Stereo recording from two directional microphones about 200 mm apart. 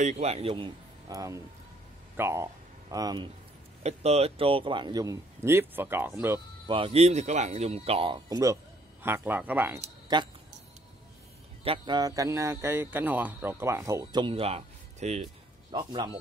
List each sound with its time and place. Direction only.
0.0 s a man's voice: 35° right (ahead or behind); by 3.3 s 20° right (ahead or behind)
3.8 s speech: 30° right (ahead or behind); by 6.4 s 10° right (ahead or behind)
6.7 s speech: 30° right (ahead or behind); by 9.8 s 10° right (ahead or behind)
10.1 s a man's voice: 20° right (ahead or behind)
11.6 s a man's voice: 25° right (ahead or behind)